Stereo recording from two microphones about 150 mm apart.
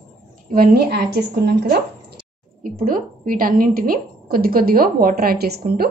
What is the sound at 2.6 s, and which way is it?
A woman's voice, 70° right (ahead or behind).